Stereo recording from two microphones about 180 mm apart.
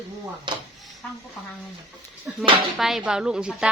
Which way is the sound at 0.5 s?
25° right (ahead or behind).